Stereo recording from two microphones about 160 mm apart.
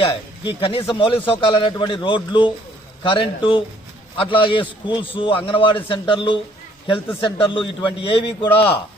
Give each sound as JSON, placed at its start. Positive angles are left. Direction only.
{"t": 0.0, "sound": "a man's voice", "side_deg": 35}